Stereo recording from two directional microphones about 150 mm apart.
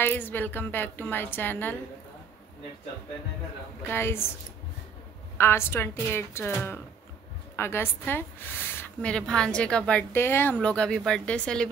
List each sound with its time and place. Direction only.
0.0 s a woman's voice: 15° left (ahead or behind)
3.8 s a woman's voice: 15° left (ahead or behind)
5.4 s a woman's voice: 15° left (ahead or behind)